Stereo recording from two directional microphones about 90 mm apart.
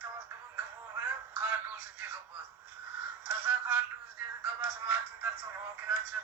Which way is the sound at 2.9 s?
15° right (ahead or behind).